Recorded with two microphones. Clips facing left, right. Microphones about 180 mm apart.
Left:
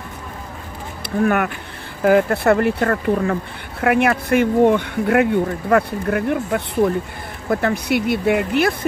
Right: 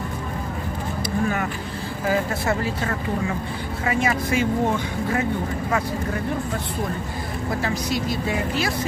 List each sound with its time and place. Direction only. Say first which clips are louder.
1.2 s speech: left 10 dB; 65° left (ahead or behind)